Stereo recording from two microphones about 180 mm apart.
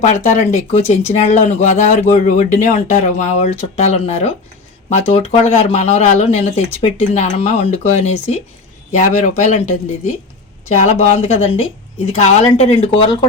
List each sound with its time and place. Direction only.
0.0 s speech: 40° left (ahead or behind)